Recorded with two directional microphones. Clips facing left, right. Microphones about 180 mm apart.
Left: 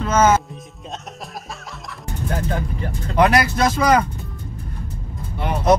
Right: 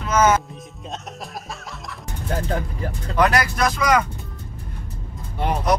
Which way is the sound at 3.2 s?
20° left (ahead or behind).